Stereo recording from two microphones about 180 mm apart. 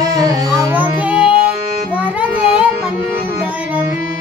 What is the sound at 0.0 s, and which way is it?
Music, 20° right (ahead or behind).